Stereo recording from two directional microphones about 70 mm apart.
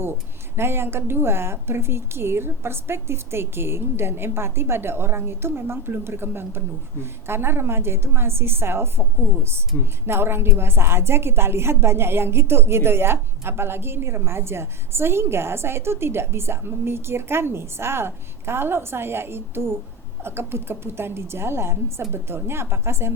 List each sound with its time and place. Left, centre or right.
0.5 s a woman's voice: right